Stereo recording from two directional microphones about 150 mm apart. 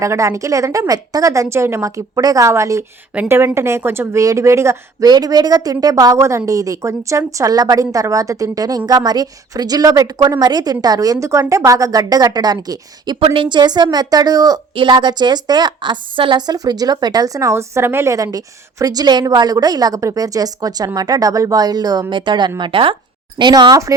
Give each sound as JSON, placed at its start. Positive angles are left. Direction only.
{"t": 0.0, "sound": "a woman's voice", "side_deg": -20}